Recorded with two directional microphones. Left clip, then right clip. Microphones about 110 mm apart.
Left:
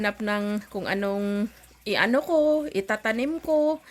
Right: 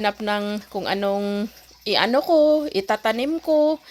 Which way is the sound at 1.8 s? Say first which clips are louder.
Right 4 dB; 35° right (ahead or behind).